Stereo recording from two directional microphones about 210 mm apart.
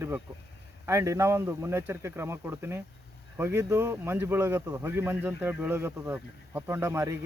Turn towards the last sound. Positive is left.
turn(degrees=-15)  # may be behind; listen again after turning